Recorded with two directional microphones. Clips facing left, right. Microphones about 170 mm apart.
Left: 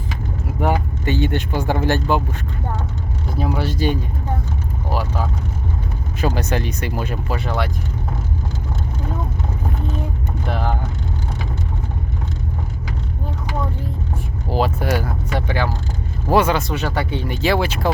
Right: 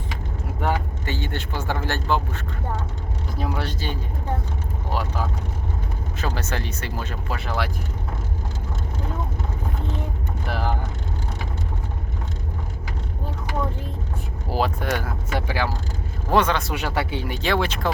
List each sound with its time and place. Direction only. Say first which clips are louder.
0.6 s speech: left 5 dB; 20° left (ahead or behind)
3.3 s speech: left 6 dB; 5° left (ahead or behind)
6.1 s speech: left 7 dB; 15° left (ahead or behind)
7.3 s speech: left 3 dB; centre (ahead or behind)
10.5 s speech: left 2 dB; 5° right (ahead or behind)
14.5 s speech: left 4 dB; 5° left (ahead or behind)
16.3 s speech: left 4 dB; 10° left (ahead or behind)
16.6 s speech: left 3 dB; 10° right (ahead or behind)
17.3 s speech: left 4 dB; 5° left (ahead or behind)